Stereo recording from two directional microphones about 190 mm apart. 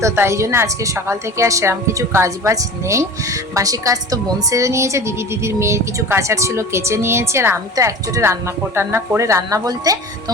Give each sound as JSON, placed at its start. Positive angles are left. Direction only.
{"t": 0.0, "sound": "a woman's voice", "side_deg": -15}